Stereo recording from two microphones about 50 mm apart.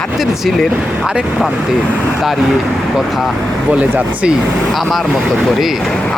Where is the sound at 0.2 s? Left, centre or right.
Centre.